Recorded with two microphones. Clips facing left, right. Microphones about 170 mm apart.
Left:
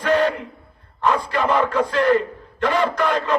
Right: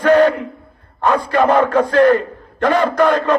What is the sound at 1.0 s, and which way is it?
A man's voice, 50° right (ahead or behind).